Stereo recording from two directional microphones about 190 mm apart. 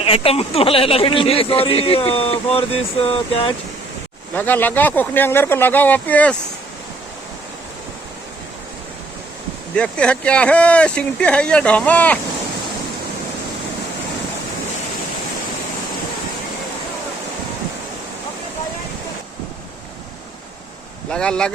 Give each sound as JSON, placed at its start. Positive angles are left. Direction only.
{"t": 0.0, "sound": "speech", "side_deg": 30}
{"t": 4.4, "sound": "speech", "side_deg": 10}
{"t": 9.7, "sound": "speech", "side_deg": 5}
{"t": 21.1, "sound": "speech", "side_deg": 5}